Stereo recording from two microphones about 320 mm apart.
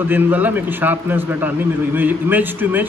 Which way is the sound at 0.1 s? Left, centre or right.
Centre.